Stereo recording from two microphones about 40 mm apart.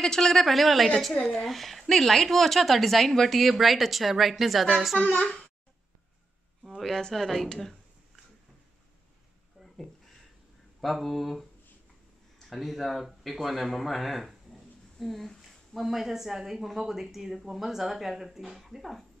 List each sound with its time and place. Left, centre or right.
0.0 s a woman's voice: centre
5.0 s a child's voice: left
7.0 s a woman's voice: centre
10.8 s a woman's voice: centre
12.4 s a woman's voice: centre